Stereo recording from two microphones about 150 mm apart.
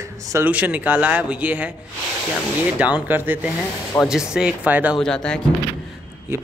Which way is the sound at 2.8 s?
10° right (ahead or behind).